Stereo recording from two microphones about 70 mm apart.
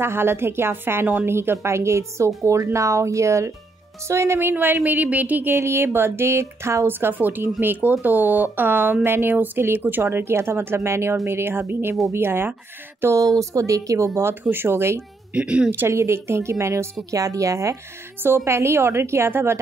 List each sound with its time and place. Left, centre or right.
0.0 s speech: right
6.9 s speech: right
13.1 s speech: right
14.4 s speech: right
15.3 s a woman's voice: centre
15.9 s speech: right
17.1 s speech: right
18.2 s speech: right